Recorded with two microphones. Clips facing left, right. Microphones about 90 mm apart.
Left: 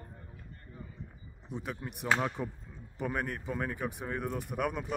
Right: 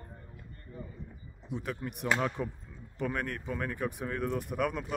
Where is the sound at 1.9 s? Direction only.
Centre (ahead or behind).